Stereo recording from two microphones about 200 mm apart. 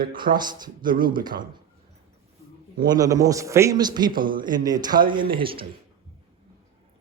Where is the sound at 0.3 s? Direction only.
20° right (ahead or behind).